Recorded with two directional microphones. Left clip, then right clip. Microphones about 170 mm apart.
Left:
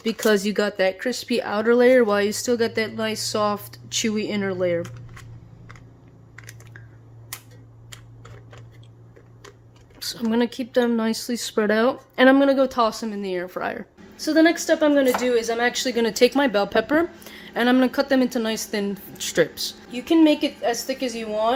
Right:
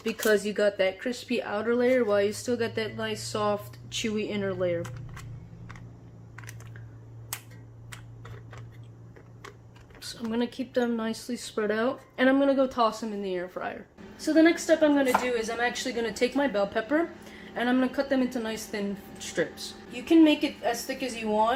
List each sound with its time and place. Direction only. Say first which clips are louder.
0.2 s speech: left 3 dB; 55° left (ahead or behind)
10.0 s speech: left 8 dB; 55° left (ahead or behind)